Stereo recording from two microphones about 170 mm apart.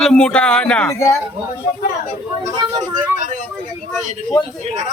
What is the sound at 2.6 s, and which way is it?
Speech, 25° right (ahead or behind).